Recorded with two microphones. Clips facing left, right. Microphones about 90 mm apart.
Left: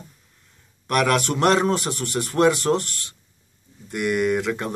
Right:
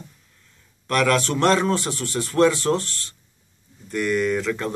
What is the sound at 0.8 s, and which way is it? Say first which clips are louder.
A man's voice: even; 20° left (ahead or behind).